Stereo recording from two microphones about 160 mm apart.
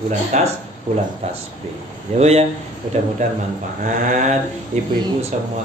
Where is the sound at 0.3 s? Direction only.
45° right (ahead or behind).